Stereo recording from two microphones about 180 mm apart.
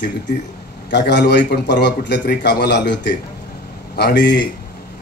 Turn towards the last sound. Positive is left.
turn(degrees=70)  # may be behind; listen again after turning